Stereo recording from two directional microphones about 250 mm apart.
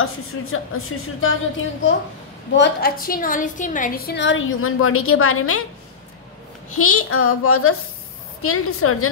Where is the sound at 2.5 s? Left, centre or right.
Left.